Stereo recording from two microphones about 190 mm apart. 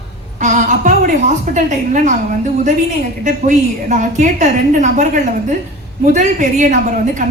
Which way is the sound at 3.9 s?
40° right (ahead or behind).